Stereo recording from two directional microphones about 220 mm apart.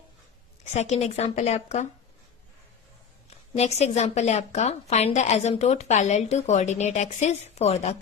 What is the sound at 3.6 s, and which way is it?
A woman's voice, 30° left (ahead or behind).